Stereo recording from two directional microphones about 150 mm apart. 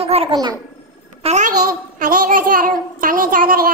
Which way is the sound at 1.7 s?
65° right (ahead or behind).